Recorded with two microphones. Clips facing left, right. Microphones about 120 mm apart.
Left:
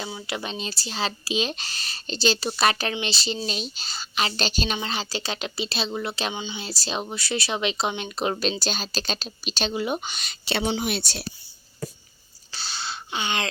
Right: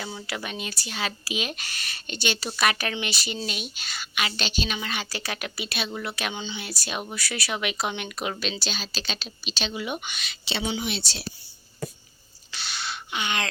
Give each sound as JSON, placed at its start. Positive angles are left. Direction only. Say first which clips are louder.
{"t": 0.0, "sound": "speech", "louder": "left 1 dB", "side_deg": 10}
{"t": 0.3, "sound": "speech", "louder": "left 2 dB", "side_deg": 25}
{"t": 4.8, "sound": "speech", "louder": "left 3 dB", "side_deg": 25}
{"t": 12.5, "sound": "a sound", "louder": "left 1 dB", "side_deg": 30}